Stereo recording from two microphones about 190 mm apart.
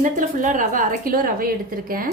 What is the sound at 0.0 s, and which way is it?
A woman's voice, 45° right (ahead or behind).